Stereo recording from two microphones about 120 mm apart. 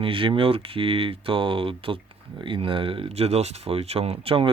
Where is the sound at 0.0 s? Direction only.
45° right (ahead or behind).